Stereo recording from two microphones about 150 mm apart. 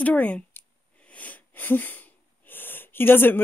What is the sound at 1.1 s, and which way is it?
Wheeze, 10° left (ahead or behind).